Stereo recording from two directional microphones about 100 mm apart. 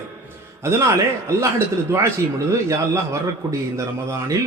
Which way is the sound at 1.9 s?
30° right (ahead or behind).